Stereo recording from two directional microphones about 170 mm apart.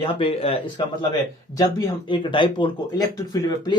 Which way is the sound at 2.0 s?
30° left (ahead or behind).